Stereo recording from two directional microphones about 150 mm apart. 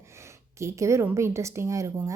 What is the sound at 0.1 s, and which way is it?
A woman's voice, 20° right (ahead or behind).